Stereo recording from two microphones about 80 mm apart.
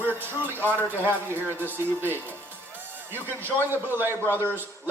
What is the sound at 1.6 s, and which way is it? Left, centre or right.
Speech, right.